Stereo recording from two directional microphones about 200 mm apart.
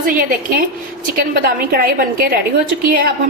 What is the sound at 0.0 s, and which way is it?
A woman's voice, 45° right (ahead or behind).